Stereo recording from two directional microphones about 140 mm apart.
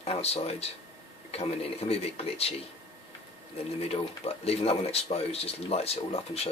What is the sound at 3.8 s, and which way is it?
Speech, 45° left (ahead or behind).